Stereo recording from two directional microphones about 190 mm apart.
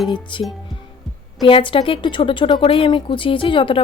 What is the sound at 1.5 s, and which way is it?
Speech, 25° left (ahead or behind).